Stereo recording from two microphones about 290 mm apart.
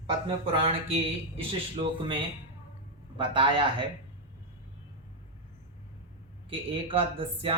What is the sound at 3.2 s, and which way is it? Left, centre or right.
Speech, centre.